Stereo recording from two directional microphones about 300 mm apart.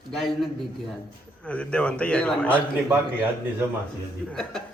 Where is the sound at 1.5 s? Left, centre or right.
Centre.